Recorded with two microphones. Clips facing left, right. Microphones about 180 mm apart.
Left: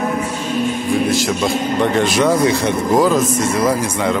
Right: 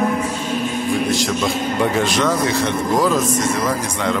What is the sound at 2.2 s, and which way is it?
Speech, 15° left (ahead or behind).